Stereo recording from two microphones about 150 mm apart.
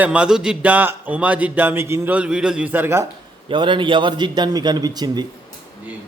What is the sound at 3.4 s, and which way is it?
A man's voice, 35° right (ahead or behind).